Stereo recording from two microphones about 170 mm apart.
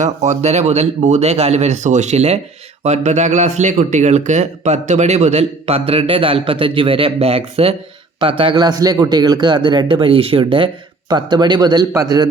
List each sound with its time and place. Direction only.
0.0 s a man's voice: 45° right (ahead or behind); by 12.3 s 25° right (ahead or behind)